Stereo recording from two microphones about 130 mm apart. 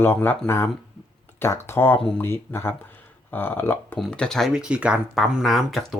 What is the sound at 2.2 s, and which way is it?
Speech, 20° left (ahead or behind).